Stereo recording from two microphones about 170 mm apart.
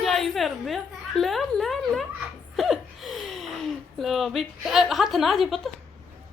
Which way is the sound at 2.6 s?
Centre (ahead or behind).